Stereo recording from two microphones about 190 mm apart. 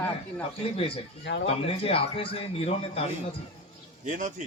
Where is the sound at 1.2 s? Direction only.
70° left (ahead or behind).